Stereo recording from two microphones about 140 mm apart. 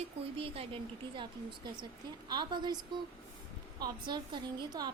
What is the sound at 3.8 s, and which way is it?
A woman's voice, 30° right (ahead or behind).